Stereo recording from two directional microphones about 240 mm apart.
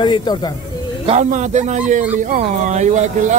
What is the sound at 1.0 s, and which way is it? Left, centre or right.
Speech, right.